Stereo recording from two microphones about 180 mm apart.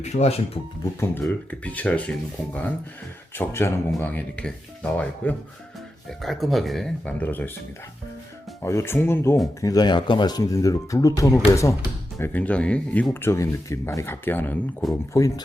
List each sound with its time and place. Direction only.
0.0 s speech: 35° left (ahead or behind)
0.9 s speech: 15° left (ahead or behind)
8.6 s speech: 15° left (ahead or behind)